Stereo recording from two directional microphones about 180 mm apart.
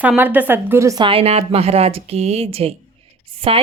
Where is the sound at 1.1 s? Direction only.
30° right (ahead or behind).